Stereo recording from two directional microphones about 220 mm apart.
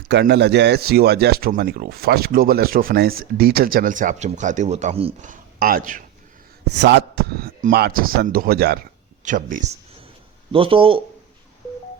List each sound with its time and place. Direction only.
0.1 s speech: 50° right (ahead or behind)
6.7 s speech: 50° right (ahead or behind)
10.5 s a man's voice: 25° right (ahead or behind)